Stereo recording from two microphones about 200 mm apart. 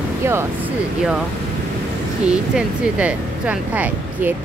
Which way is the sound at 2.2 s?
5° right (ahead or behind).